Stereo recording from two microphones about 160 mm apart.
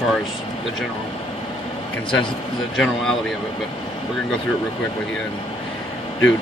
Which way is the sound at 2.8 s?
Centre (ahead or behind).